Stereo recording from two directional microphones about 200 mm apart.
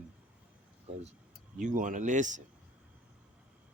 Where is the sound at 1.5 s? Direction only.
40° right (ahead or behind).